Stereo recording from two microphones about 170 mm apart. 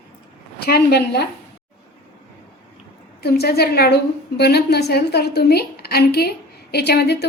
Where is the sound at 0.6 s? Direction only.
70° left (ahead or behind).